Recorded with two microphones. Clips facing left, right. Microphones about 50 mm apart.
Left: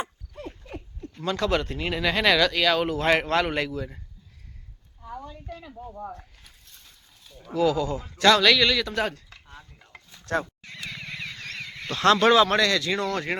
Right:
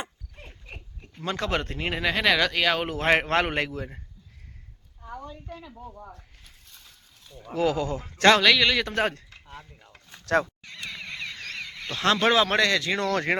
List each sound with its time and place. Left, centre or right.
1.3 s a man's voice: right
2.0 s speech: centre
2.4 s a man's voice: centre
5.0 s a sound: centre
5.9 s speech: centre
7.5 s speech: right
8.4 s speech: centre
8.7 s speech: right
10.3 s speech: right
11.9 s a man's voice: centre
13.1 s speech: right